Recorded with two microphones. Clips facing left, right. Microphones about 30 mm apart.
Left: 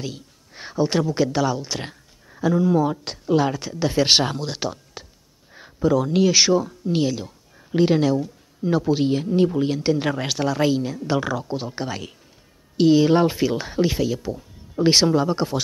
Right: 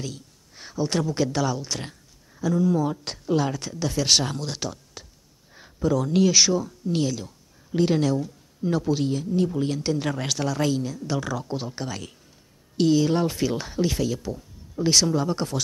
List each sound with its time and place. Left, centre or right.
0.0 s speech: left
9.0 s speech: left
9.6 s speech: centre
11.3 s speech: centre
14.8 s speech: left
15.2 s speech: centre